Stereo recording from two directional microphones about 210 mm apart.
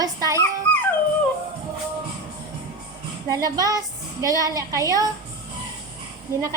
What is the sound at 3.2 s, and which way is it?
A woman's voice, 15° right (ahead or behind).